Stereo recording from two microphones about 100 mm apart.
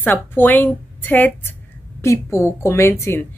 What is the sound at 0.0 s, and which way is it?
A woman's voice, 20° left (ahead or behind).